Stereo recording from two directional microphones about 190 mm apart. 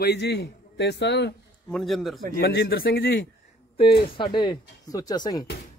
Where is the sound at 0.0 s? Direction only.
60° left (ahead or behind).